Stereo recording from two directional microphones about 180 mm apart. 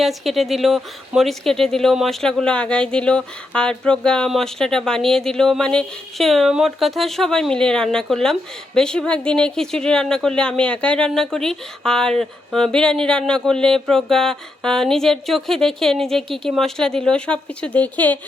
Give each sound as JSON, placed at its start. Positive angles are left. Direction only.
{"t": 0.0, "sound": "speech", "side_deg": 0}